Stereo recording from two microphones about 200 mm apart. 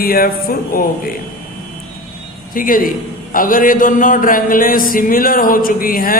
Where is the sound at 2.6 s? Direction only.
45° left (ahead or behind).